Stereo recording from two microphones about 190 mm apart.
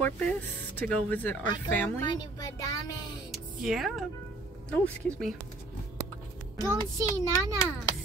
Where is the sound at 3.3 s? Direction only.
Centre (ahead or behind).